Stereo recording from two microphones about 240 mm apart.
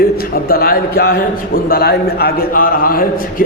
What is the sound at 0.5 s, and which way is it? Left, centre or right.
A man's voice, left.